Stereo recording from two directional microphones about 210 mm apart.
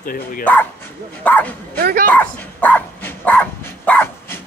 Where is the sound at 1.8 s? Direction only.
45° right (ahead or behind).